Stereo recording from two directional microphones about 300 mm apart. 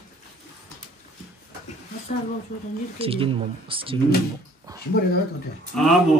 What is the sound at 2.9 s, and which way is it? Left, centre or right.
Speech, centre.